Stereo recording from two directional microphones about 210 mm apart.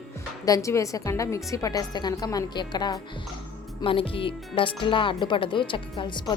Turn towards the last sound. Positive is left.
turn(degrees=20)  # may be behind; listen again after turning